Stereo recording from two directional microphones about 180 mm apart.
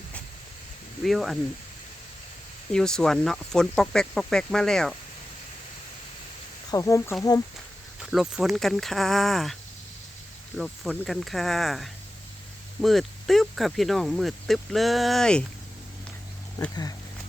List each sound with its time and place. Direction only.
1.0 s speech: centre (ahead or behind)
2.7 s speech: 5° left (ahead or behind)
6.7 s speech: 20° left (ahead or behind)
8.0 s speech: 5° right (ahead or behind)
10.6 s speech: centre (ahead or behind)
16.6 s speech: 20° left (ahead or behind)